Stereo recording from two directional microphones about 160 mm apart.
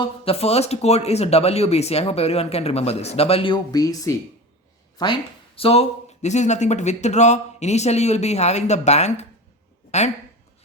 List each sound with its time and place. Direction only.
0.0 s speech: 40° left (ahead or behind)